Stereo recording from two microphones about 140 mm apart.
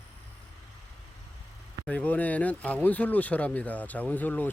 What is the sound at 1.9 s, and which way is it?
Speech, 10° left (ahead or behind).